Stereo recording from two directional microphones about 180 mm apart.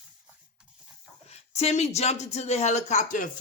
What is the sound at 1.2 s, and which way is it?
A woman's voice, 35° left (ahead or behind).